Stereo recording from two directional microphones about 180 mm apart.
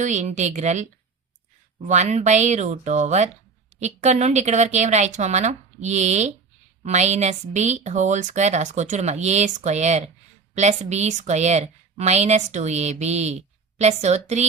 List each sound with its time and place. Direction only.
0.0 s a woman's voice: 40° right (ahead or behind)
1.9 s a woman's voice: 40° right (ahead or behind)